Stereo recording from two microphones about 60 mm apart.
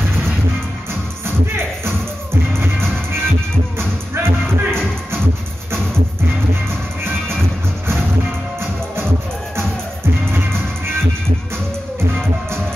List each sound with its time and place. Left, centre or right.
1.2 s music: right
7.0 s music: right
10.3 s music: right